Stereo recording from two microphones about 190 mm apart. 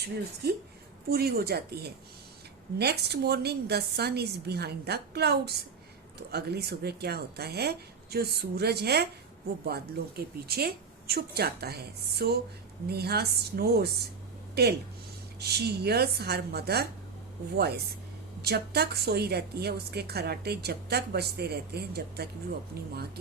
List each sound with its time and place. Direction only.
0.4 s a woman's voice: 60° right (ahead or behind)
18.4 s a woman's voice: 55° right (ahead or behind)